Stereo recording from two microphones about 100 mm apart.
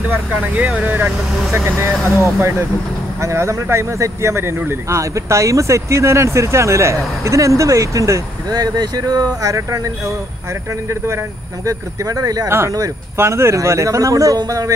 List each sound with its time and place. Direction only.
0.1 s speech: 15° right (ahead or behind)
3.2 s speech: 30° right (ahead or behind)
11.6 s speech: 35° right (ahead or behind)
12.4 s speech: 30° right (ahead or behind)